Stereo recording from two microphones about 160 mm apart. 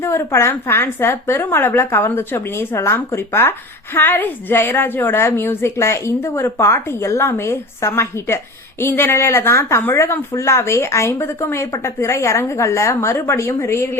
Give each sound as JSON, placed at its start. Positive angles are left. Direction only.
{"t": 0.0, "sound": "speech", "side_deg": 15}